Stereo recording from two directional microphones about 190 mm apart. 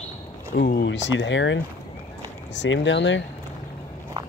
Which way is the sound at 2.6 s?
70° left (ahead or behind).